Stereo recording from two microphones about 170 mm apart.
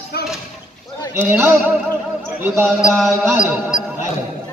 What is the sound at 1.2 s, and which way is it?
A man's voice, 10° right (ahead or behind).